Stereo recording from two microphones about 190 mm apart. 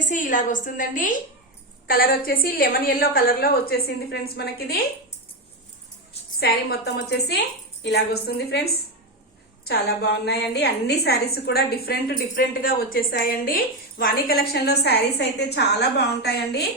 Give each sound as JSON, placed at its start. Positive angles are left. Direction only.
{"t": 0.0, "sound": "a woman's voice", "side_deg": 45}
{"t": 6.4, "sound": "a woman's voice", "side_deg": 55}